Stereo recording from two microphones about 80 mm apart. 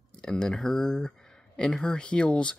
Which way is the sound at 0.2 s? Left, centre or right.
Centre.